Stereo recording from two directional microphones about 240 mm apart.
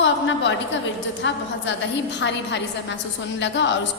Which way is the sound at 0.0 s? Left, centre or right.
Left.